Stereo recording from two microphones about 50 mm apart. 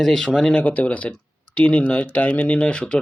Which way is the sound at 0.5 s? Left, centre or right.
Left.